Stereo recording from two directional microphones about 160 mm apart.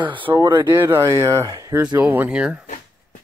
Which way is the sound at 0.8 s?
15° right (ahead or behind).